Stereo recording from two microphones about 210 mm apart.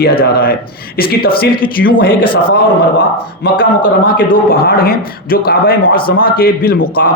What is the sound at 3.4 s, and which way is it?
A man's voice, 45° left (ahead or behind).